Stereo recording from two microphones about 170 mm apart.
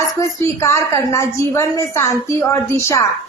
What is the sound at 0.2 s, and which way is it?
A woman's voice, 15° left (ahead or behind).